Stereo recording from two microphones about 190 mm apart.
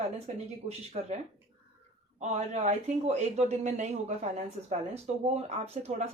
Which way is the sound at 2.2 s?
35° right (ahead or behind).